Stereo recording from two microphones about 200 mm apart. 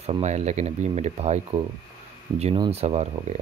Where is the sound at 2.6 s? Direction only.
30° right (ahead or behind).